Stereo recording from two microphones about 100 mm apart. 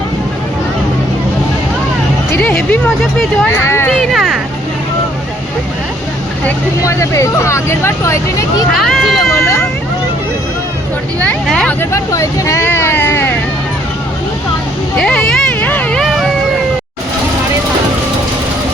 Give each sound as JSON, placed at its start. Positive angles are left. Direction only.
{"t": 2.3, "sound": "music", "side_deg": 20}
{"t": 2.6, "sound": "speech", "side_deg": 15}
{"t": 3.4, "sound": "speech", "side_deg": 25}
{"t": 3.9, "sound": "a sound", "side_deg": 0}
{"t": 6.8, "sound": "speech", "side_deg": 30}
{"t": 8.8, "sound": "speech", "side_deg": 0}
{"t": 9.3, "sound": "vehicle", "side_deg": 30}
{"t": 11.4, "sound": "speech", "side_deg": 5}
{"t": 11.8, "sound": "speech", "side_deg": 30}
{"t": 14.9, "sound": "a sound", "side_deg": 5}
{"t": 16.0, "sound": "a sound", "side_deg": 0}